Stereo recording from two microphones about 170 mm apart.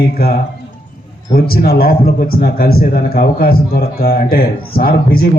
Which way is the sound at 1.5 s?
65° left (ahead or behind).